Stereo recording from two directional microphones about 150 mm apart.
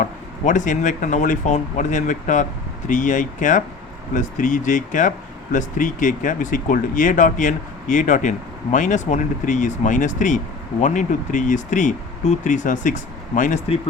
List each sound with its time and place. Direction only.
0.0 s speech: 55° left (ahead or behind)